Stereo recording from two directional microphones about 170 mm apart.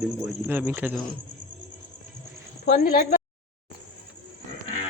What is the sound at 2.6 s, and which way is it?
Speech, 60° left (ahead or behind).